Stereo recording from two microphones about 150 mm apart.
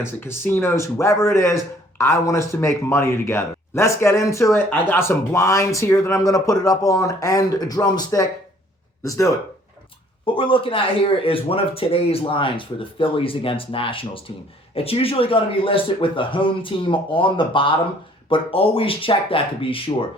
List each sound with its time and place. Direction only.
0.0 s a man's voice: 15° left (ahead or behind)
10.2 s speech: 35° left (ahead or behind)